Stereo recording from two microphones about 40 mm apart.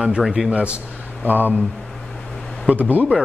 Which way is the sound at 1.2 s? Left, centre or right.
Right.